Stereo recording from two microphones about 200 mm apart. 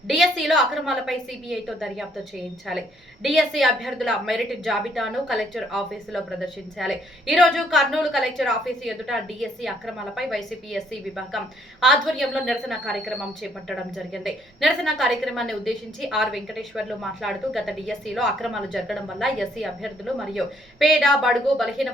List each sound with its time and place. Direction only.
0.1 s a woman's voice: centre (ahead or behind)
3.2 s a woman's voice: centre (ahead or behind)